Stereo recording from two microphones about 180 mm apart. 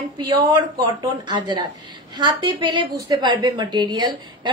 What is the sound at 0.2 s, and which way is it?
A woman's voice, 25° right (ahead or behind).